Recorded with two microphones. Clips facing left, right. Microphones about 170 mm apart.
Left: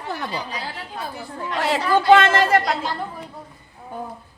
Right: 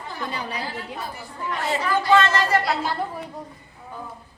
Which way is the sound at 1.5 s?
75° left (ahead or behind).